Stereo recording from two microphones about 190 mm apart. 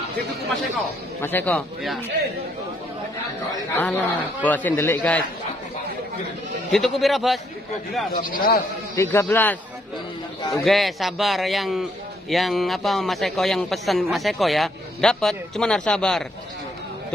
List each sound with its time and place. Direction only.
1.2 s a man's voice: 10° left (ahead or behind)
3.7 s a man's voice: 10° left (ahead or behind)
6.7 s a man's voice: centre (ahead or behind)
8.3 s speech: 50° left (ahead or behind)
8.9 s a man's voice: 15° left (ahead or behind)
10.6 s a man's voice: centre (ahead or behind)